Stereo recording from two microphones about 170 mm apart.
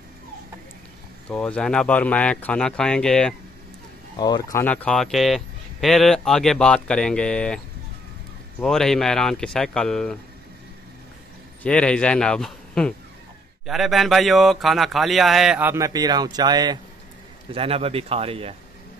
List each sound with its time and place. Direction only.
1.3 s speech: 5° left (ahead or behind)
4.2 s speech: 20° left (ahead or behind)
4.6 s speech: 5° left (ahead or behind)
11.6 s speech: 5° left (ahead or behind); by 16.8 s 25° right (ahead or behind)
17.5 s a man's voice: 35° right (ahead or behind)